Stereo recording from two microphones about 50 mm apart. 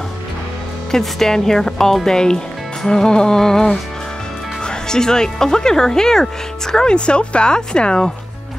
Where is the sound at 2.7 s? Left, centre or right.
Centre.